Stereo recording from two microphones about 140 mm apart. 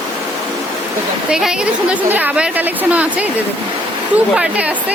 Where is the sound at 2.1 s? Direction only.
10° right (ahead or behind).